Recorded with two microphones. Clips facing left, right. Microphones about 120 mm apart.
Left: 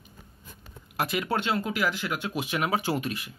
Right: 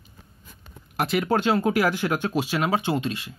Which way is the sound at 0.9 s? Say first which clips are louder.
Right 5 dB; 30° right (ahead or behind).